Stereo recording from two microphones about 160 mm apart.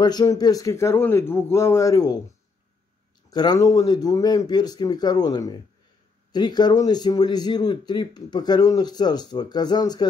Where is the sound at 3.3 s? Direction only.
25° left (ahead or behind).